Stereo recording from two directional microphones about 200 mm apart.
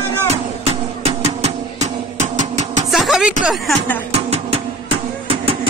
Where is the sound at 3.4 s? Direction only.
Centre (ahead or behind).